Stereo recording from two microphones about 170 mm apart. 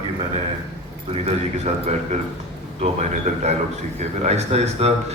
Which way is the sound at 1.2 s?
40° right (ahead or behind).